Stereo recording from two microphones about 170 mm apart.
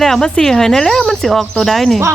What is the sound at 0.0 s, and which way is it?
Speech, 5° left (ahead or behind).